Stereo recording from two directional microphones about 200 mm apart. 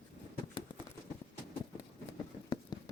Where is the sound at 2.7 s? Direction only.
20° left (ahead or behind).